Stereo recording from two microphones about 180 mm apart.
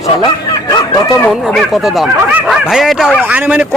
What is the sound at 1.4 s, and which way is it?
Speech, centre (ahead or behind).